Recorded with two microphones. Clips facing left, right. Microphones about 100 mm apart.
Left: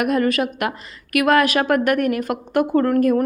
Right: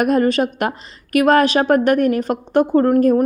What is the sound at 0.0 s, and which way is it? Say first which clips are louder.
A woman's voice: right 3 dB; 35° right (ahead or behind).